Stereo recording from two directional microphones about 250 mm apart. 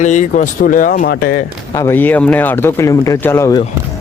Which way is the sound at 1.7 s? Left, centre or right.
Centre.